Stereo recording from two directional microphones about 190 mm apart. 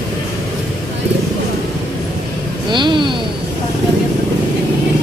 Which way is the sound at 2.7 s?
25° right (ahead or behind).